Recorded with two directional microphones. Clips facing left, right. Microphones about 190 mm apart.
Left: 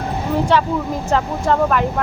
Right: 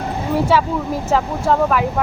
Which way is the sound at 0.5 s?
5° right (ahead or behind).